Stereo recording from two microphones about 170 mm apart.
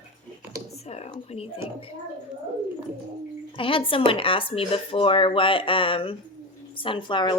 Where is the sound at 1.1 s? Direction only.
35° left (ahead or behind).